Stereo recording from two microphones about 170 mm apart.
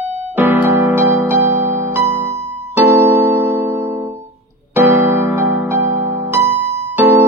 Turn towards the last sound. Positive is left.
turn(degrees=-15)  # may be behind; listen again after turning